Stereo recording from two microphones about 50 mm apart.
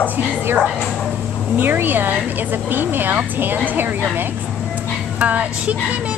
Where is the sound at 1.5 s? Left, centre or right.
Right.